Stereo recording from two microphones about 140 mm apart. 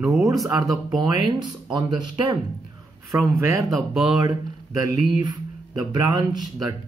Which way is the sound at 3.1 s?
20° right (ahead or behind).